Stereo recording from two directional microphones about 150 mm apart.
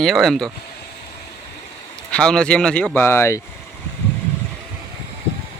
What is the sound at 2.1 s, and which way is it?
Speech, 5° left (ahead or behind).